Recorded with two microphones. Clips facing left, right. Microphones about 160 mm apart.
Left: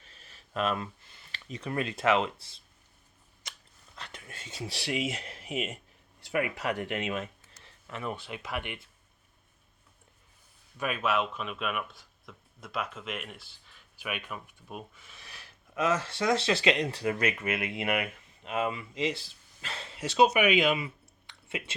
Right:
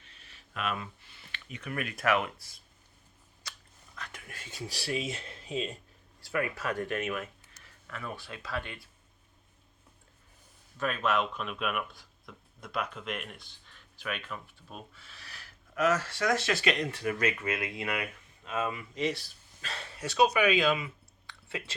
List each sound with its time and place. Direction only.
0.0 s speech: 40° left (ahead or behind)
3.9 s speech: 30° left (ahead or behind)
10.8 s speech: 10° left (ahead or behind)